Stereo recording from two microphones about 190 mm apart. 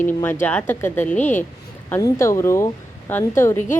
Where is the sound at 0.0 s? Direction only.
10° left (ahead or behind).